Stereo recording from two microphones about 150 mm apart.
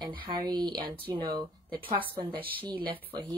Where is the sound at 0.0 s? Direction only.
30° right (ahead or behind).